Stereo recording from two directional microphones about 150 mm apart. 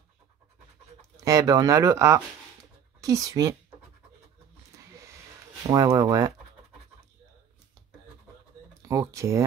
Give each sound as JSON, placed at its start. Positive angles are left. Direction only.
{"t": 1.1, "sound": "speech", "side_deg": -20}
{"t": 5.7, "sound": "speech", "side_deg": -25}
{"t": 8.8, "sound": "speech", "side_deg": -20}